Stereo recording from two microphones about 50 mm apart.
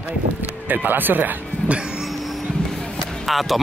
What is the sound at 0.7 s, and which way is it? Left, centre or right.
Speech, right.